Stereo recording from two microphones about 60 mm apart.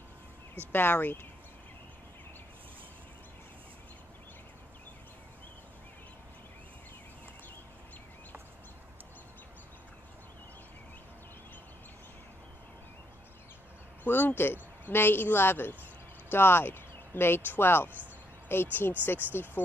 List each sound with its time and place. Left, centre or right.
0.6 s speech: left
14.0 s speech: left